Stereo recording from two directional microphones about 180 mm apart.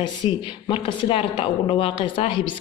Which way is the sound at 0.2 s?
30° left (ahead or behind).